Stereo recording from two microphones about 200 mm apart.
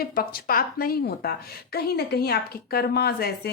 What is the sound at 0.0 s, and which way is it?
A woman's voice, 50° left (ahead or behind).